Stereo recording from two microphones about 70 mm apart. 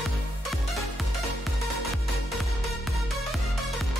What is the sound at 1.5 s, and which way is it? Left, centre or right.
Music, centre.